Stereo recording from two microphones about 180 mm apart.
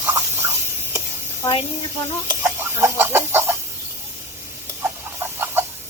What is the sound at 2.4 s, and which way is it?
Chicken, 15° right (ahead or behind).